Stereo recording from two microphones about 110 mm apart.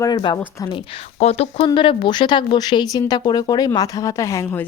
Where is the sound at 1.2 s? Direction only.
75° left (ahead or behind); by 4.4 s 30° left (ahead or behind).